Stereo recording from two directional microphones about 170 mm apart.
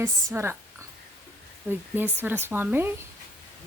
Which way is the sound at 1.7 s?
10° right (ahead or behind).